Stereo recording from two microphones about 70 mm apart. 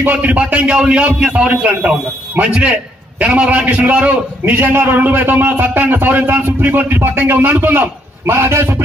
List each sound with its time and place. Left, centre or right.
0.0 s a man's voice: right
4.5 s a man's voice: right